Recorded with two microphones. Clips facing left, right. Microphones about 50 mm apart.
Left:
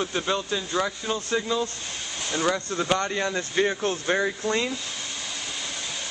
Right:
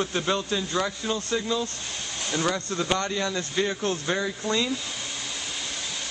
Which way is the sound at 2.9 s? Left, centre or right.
Left.